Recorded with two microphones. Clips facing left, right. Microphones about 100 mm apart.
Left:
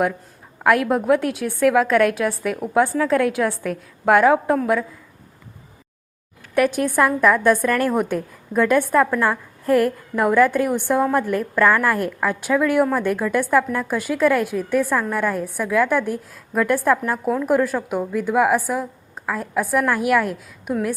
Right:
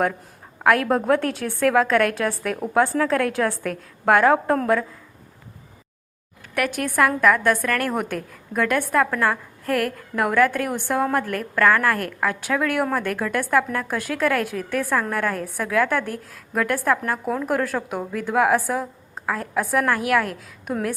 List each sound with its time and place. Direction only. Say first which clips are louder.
0.6 s a woman's voice: left 1 dB; 15° left (ahead or behind)
6.5 s a woman's voice: left 6 dB; 25° left (ahead or behind); by 9.4 s 10° left (ahead or behind)
9.6 s a woman's voice: left 6 dB; 20° left (ahead or behind)